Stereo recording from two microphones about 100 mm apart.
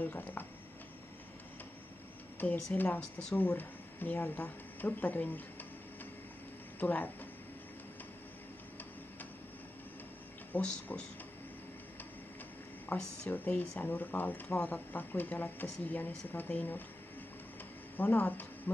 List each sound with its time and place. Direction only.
0.0 s speech: 15° left (ahead or behind)
2.4 s speech: 15° left (ahead or behind)
6.8 s speech: 15° left (ahead or behind)
10.5 s speech: 15° left (ahead or behind)
12.8 s speech: 15° left (ahead or behind)
17.9 s speech: 15° left (ahead or behind)